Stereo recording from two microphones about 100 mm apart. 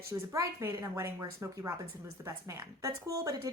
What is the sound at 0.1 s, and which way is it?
A woman's voice, 30° right (ahead or behind).